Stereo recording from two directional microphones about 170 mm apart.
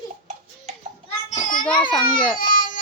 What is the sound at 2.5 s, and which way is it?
Baby cry, 55° left (ahead or behind).